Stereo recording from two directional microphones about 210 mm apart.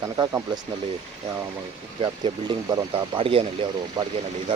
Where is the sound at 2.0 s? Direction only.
20° right (ahead or behind).